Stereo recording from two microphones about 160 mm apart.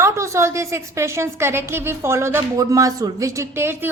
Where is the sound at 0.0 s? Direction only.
15° right (ahead or behind).